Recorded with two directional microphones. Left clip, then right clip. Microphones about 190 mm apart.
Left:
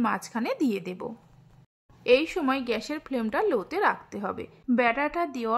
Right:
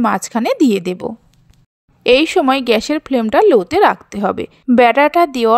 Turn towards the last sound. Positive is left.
turn(degrees=-45)  # may be behind; listen again after turning